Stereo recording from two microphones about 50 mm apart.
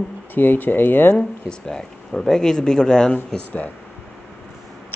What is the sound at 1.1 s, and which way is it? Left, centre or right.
Speech, centre.